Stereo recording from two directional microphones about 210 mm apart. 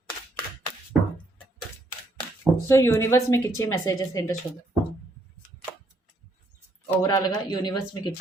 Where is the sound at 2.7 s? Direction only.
15° left (ahead or behind).